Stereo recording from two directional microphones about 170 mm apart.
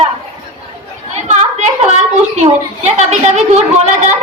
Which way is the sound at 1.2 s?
40° right (ahead or behind).